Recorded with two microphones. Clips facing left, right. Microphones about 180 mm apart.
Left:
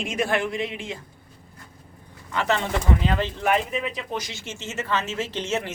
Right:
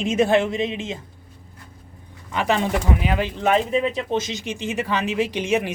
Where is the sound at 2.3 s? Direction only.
15° right (ahead or behind).